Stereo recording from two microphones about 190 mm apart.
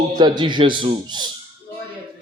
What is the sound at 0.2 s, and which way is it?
A man's voice, 25° right (ahead or behind).